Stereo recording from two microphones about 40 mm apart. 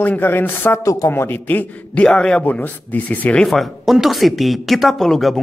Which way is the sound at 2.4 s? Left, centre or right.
Left.